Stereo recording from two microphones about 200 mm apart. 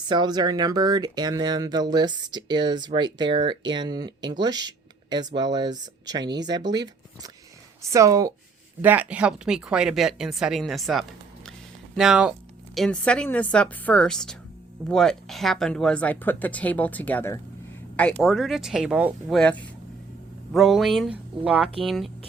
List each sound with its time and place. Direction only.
0.1 s a woman's voice: 20° right (ahead or behind); by 17.4 s 10° left (ahead or behind)
18.2 s a woman's voice: centre (ahead or behind)